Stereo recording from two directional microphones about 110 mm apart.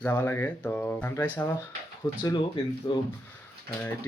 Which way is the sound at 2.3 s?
45° left (ahead or behind).